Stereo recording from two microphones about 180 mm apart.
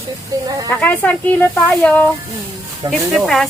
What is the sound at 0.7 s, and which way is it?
Speech, 10° left (ahead or behind).